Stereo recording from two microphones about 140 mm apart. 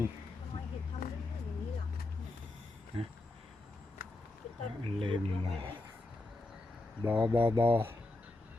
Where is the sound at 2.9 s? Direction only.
40° right (ahead or behind).